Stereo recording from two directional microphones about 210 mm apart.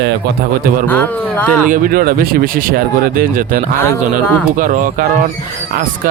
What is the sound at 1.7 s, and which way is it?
Speech, 45° right (ahead or behind).